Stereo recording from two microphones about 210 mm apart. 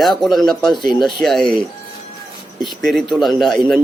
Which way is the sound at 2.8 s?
Centre (ahead or behind).